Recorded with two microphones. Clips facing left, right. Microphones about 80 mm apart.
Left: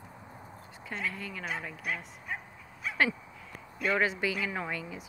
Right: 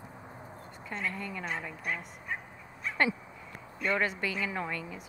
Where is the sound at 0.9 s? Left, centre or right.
Centre.